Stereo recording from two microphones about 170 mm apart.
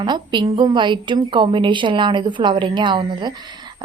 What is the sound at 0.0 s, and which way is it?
A woman's voice, 25° right (ahead or behind).